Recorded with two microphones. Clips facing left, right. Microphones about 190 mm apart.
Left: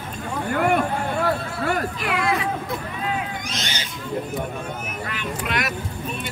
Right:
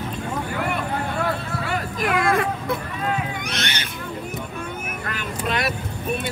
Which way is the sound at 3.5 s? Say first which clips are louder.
Right 2 dB; 65° right (ahead or behind).